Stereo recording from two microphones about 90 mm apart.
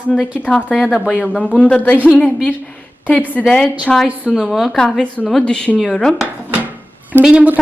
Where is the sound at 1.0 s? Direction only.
10° left (ahead or behind).